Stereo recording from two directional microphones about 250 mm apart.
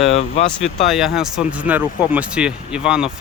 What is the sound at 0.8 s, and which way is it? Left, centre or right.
Speech, centre.